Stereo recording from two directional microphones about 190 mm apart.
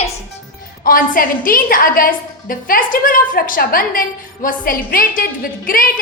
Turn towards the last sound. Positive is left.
turn(degrees=50)  # may be behind; listen again after turning